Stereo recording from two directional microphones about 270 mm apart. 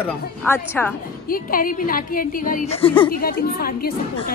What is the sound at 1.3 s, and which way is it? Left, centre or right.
A woman's voice, left.